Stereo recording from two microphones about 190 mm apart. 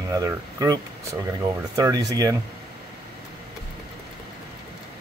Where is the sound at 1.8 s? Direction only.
20° right (ahead or behind).